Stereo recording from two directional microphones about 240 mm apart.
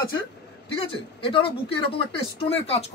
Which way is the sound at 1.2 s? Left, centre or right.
Left.